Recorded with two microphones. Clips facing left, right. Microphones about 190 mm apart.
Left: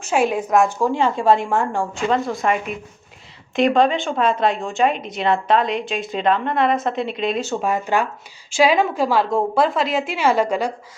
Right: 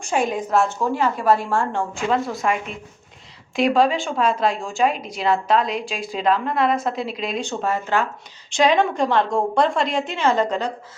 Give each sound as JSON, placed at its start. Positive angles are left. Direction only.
{"t": 0.0, "sound": "a woman's voice", "side_deg": 5}
{"t": 0.9, "sound": "a woman's voice", "side_deg": 25}
{"t": 2.0, "sound": "a woman's voice", "side_deg": 0}
{"t": 7.6, "sound": "a woman's voice", "side_deg": 15}